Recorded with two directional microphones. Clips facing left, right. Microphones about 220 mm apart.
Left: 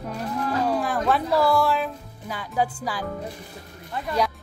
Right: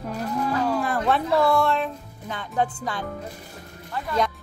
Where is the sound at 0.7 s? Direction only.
Centre (ahead or behind).